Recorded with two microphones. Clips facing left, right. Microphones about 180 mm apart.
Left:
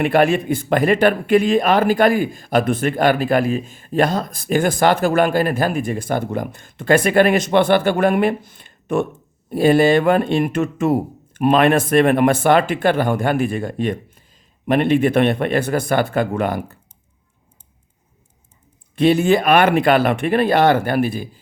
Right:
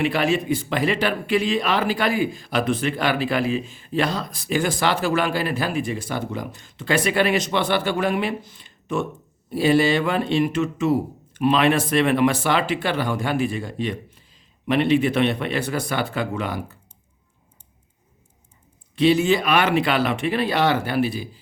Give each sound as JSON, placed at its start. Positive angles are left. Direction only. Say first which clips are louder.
{"t": 0.0, "sound": "speech", "louder": "left 5 dB", "side_deg": 55}
{"t": 18.9, "sound": "speech", "louder": "left 3 dB", "side_deg": 50}